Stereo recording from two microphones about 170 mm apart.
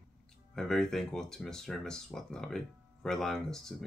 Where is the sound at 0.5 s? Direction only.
5° left (ahead or behind).